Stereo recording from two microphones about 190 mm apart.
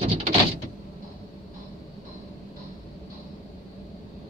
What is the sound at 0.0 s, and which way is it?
Sliding door, 30° right (ahead or behind).